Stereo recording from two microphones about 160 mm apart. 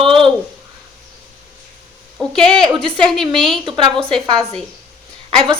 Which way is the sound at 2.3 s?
30° right (ahead or behind).